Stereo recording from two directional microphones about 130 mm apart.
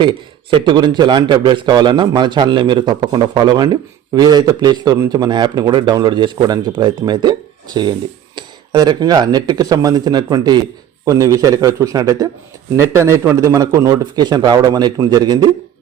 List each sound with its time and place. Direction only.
0.5 s a man's voice: 35° right (ahead or behind)